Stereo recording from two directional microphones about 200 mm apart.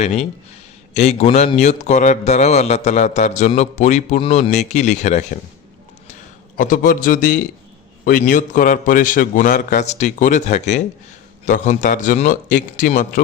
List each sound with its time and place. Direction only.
0.0 s a man's voice: 35° left (ahead or behind)
6.6 s a man's voice: 45° left (ahead or behind)